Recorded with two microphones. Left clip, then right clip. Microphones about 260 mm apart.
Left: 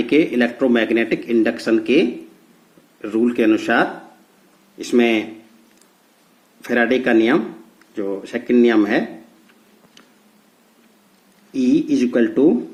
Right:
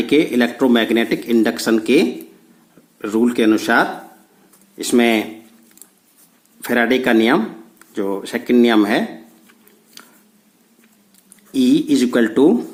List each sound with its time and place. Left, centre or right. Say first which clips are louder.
0.0 s speech: right 1 dB; right
4.9 s speech: right 1 dB; right
6.7 s speech: right 1 dB; right
11.9 s speech: right 2 dB; right